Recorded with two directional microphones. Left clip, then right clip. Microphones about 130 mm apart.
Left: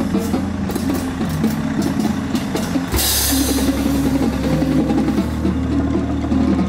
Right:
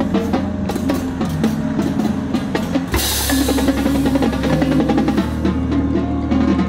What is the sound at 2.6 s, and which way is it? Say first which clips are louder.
Music: right 1 dB; centre (ahead or behind).